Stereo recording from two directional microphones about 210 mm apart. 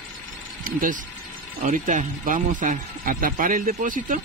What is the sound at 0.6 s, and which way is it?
Speech, 40° right (ahead or behind).